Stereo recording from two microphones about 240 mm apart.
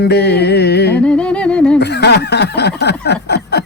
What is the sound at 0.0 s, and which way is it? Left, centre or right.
Speech, left.